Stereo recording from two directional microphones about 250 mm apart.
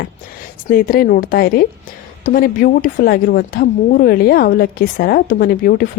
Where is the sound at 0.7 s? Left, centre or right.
Left.